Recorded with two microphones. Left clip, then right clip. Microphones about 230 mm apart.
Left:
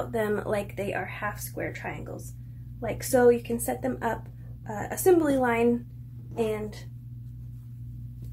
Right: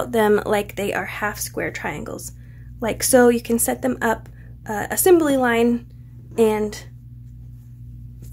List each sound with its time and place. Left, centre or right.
0.1 s a woman's voice: right